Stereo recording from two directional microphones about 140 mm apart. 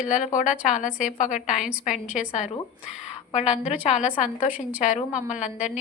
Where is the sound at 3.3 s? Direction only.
50° left (ahead or behind).